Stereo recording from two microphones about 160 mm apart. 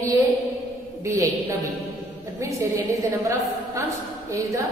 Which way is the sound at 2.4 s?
20° right (ahead or behind).